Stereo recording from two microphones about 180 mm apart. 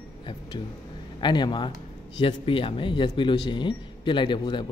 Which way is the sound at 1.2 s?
25° left (ahead or behind).